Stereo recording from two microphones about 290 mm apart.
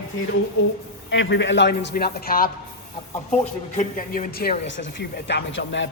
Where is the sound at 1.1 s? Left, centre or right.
Left.